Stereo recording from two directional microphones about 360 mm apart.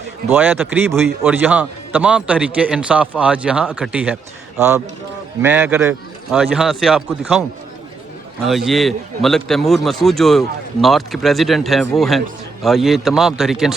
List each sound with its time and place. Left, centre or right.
0.3 s a man's voice: centre
8.4 s a man's voice: centre